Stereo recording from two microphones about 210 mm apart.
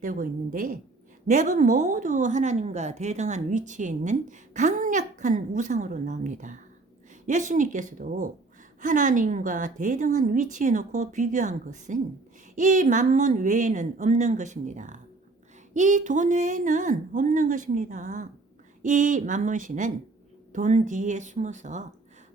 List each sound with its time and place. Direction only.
0.0 s a woman's voice: 40° right (ahead or behind)